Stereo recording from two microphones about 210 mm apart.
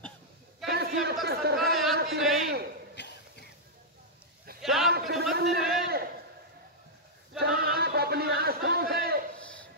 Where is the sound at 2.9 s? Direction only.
55° left (ahead or behind).